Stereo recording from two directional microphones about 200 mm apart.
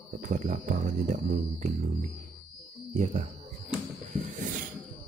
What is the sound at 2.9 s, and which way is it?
Speech, 35° right (ahead or behind).